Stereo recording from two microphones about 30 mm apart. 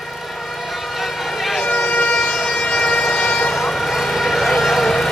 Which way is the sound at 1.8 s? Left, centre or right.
Left.